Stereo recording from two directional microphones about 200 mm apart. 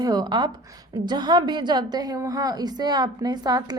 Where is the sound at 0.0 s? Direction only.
20° right (ahead or behind).